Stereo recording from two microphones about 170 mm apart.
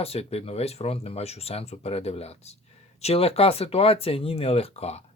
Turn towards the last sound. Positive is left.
turn(degrees=40)  # may be behind; listen again after turning